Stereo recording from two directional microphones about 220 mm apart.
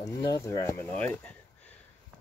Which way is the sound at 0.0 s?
15° left (ahead or behind).